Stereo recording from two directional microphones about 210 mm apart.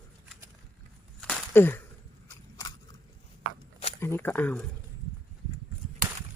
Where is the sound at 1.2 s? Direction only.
Centre (ahead or behind).